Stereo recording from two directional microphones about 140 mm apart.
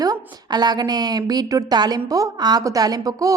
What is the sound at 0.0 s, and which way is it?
A woman's voice, 30° right (ahead or behind).